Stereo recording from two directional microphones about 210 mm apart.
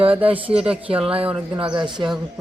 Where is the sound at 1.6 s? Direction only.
25° right (ahead or behind).